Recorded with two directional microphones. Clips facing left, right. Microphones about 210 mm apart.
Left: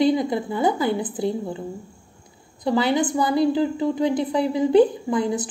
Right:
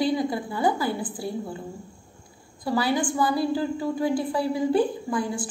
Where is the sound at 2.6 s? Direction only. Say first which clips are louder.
Left 4 dB; 20° left (ahead or behind).